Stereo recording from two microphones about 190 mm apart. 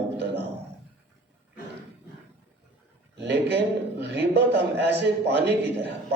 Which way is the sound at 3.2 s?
60° right (ahead or behind).